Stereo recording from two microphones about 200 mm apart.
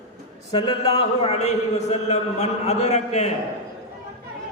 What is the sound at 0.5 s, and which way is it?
A man's voice, 25° left (ahead or behind).